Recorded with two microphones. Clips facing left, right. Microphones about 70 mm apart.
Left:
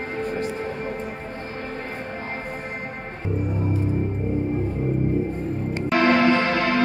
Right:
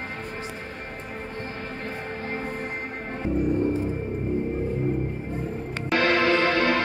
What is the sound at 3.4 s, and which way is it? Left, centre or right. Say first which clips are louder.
Music: right 5 dB; centre.